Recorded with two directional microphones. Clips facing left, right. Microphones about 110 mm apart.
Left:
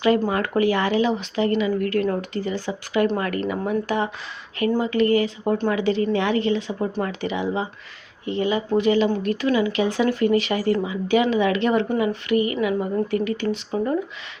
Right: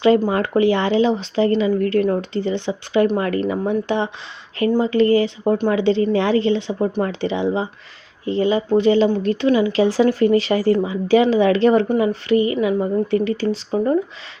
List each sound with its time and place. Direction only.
0.3 s speech: 25° right (ahead or behind)